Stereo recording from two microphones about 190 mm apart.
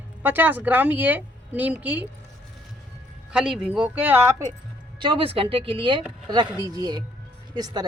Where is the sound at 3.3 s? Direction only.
5° right (ahead or behind).